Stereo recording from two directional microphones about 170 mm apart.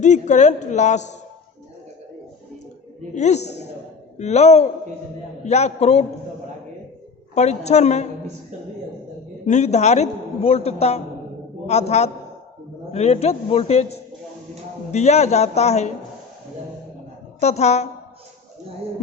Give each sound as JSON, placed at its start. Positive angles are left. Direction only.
{"t": 0.0, "sound": "a woman's voice", "side_deg": 45}
{"t": 3.2, "sound": "a woman's voice", "side_deg": 45}
{"t": 3.4, "sound": "a woman's voice", "side_deg": 80}
{"t": 4.2, "sound": "a man's voice", "side_deg": 40}
{"t": 7.3, "sound": "a man's voice", "side_deg": 40}
{"t": 9.5, "sound": "a man's voice", "side_deg": 40}
{"t": 17.4, "sound": "a man's voice", "side_deg": 40}